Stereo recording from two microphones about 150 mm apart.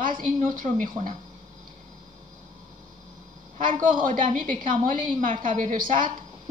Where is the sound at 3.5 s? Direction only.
55° right (ahead or behind).